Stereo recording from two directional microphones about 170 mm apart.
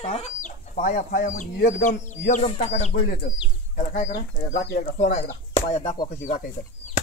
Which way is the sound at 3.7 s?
55° left (ahead or behind).